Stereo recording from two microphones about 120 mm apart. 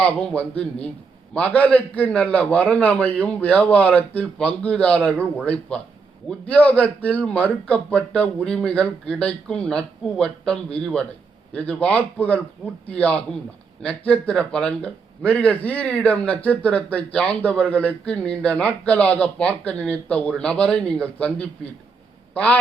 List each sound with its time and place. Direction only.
0.0 s a man's voice: 10° left (ahead or behind)